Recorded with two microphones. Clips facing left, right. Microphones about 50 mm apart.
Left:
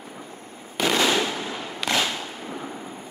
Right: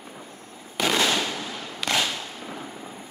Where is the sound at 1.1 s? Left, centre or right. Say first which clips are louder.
Left 3 dB; centre.